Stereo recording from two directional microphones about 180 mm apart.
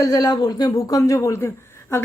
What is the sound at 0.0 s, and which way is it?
Speech, 20° left (ahead or behind).